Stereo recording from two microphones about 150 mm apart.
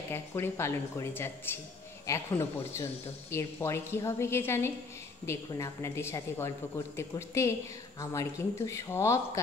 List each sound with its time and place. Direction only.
0.1 s speech: 15° left (ahead or behind)